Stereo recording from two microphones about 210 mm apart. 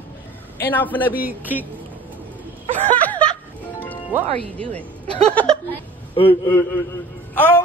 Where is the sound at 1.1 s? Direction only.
10° right (ahead or behind).